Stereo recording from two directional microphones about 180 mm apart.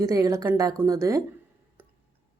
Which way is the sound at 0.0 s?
20° right (ahead or behind).